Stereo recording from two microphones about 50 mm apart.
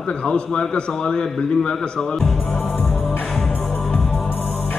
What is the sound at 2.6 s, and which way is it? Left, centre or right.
Music, left.